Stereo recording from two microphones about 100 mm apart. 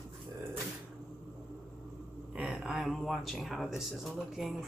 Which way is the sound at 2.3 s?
5° right (ahead or behind).